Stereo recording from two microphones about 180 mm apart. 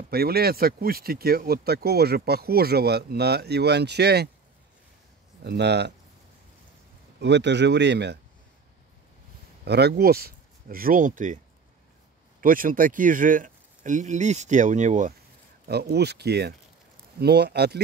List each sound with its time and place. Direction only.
0.1 s speech: 60° right (ahead or behind)
5.4 s speech: 70° right (ahead or behind)
7.2 s speech: 75° right (ahead or behind)
9.7 s speech: 65° right (ahead or behind); by 11.3 s 45° right (ahead or behind)
12.4 s speech: 50° right (ahead or behind)
15.6 s speech: 65° right (ahead or behind)